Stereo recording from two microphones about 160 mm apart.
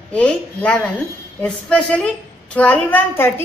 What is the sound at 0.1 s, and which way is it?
A woman's voice, 10° left (ahead or behind).